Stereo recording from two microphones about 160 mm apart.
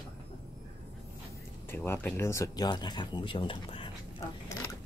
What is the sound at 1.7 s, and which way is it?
Speech, 15° left (ahead or behind).